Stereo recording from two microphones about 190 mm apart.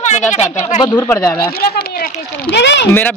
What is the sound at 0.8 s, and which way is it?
Speech, 15° left (ahead or behind).